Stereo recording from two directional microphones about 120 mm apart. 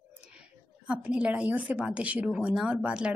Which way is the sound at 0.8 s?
10° right (ahead or behind).